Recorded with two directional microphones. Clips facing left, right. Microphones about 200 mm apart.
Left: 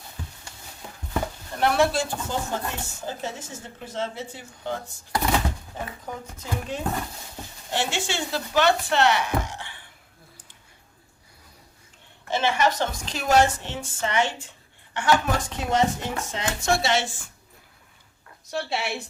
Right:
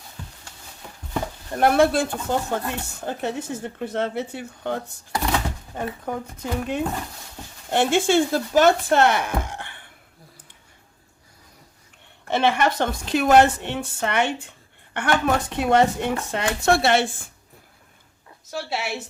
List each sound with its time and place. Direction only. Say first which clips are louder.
1.5 s speech: right 4 dB; 50° right (ahead or behind)
6.1 s speech: right 6 dB; 60° right (ahead or behind)
12.3 s speech: right 3 dB; 60° right (ahead or behind)
18.5 s speech: even; 5° right (ahead or behind)